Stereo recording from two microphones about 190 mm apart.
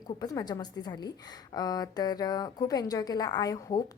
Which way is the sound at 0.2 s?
20° left (ahead or behind).